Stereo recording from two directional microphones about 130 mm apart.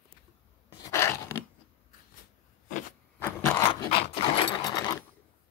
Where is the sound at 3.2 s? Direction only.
15° left (ahead or behind).